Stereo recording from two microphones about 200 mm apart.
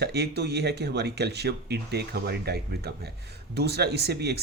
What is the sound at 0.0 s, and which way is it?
Speech, 55° right (ahead or behind).